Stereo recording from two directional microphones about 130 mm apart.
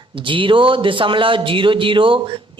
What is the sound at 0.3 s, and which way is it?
A woman's voice, 40° right (ahead or behind).